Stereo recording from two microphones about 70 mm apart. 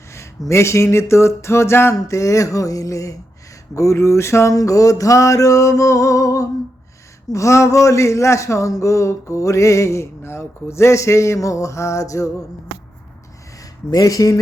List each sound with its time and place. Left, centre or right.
0.1 s speech: left
13.9 s speech: left